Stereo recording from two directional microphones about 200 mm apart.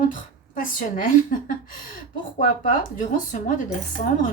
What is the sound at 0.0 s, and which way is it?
A woman's voice, 40° left (ahead or behind).